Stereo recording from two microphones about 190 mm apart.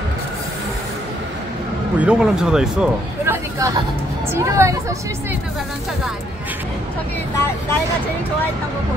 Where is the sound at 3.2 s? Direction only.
15° right (ahead or behind).